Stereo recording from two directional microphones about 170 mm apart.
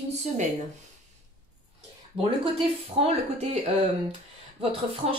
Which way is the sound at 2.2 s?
35° right (ahead or behind).